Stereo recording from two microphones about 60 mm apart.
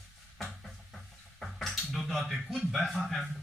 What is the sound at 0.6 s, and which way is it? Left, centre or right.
Music, centre.